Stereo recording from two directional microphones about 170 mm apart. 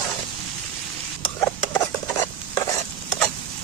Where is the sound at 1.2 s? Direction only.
15° left (ahead or behind).